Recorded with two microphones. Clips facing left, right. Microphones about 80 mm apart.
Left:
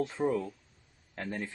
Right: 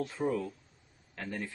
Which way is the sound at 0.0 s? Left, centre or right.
Left.